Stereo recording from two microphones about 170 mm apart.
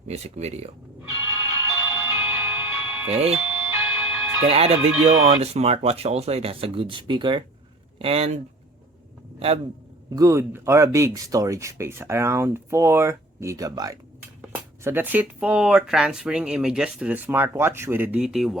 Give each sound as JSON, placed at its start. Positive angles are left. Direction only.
{"t": 0.1, "sound": "speech", "side_deg": -40}
{"t": 1.6, "sound": "music", "side_deg": -15}
{"t": 3.1, "sound": "speech", "side_deg": -35}
{"t": 3.4, "sound": "music", "side_deg": -15}
{"t": 4.4, "sound": "speech", "side_deg": -35}
{"t": 10.2, "sound": "speech", "side_deg": -15}
{"t": 14.8, "sound": "speech", "side_deg": -10}